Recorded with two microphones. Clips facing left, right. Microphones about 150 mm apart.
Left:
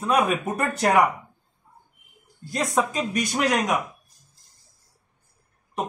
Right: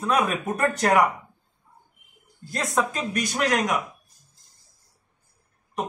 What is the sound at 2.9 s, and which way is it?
Speech, centre (ahead or behind).